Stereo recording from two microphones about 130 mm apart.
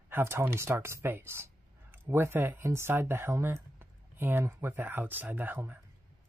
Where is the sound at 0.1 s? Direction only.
20° right (ahead or behind).